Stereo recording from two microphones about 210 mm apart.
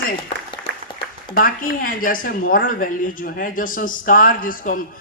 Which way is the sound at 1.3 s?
40° left (ahead or behind).